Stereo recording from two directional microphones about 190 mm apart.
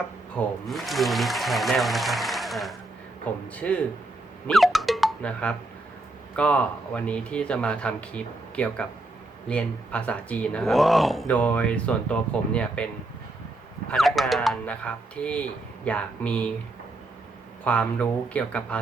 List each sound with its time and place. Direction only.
0.3 s speech: centre (ahead or behind)
4.4 s a sound: centre (ahead or behind)
6.3 s speech: 5° left (ahead or behind)
17.6 s speech: 5° left (ahead or behind)